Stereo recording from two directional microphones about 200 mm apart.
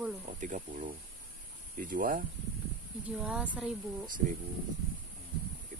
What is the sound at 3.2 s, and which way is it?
Speech, 5° right (ahead or behind).